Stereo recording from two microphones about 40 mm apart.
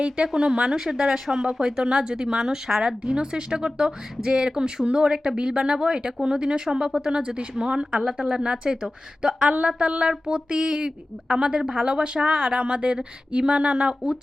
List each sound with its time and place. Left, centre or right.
0.3 s speech: right
2.8 s speech: right
7.2 s speech: right
8.0 s speech: centre